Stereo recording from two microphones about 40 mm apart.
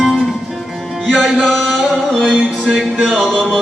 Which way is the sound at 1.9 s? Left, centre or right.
Centre.